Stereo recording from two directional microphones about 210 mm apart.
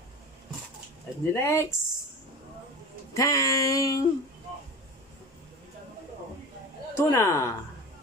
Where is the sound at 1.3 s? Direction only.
10° left (ahead or behind).